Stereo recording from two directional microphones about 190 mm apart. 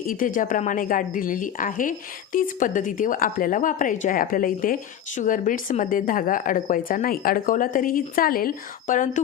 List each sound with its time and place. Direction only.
0.0 s a woman's voice: 45° left (ahead or behind)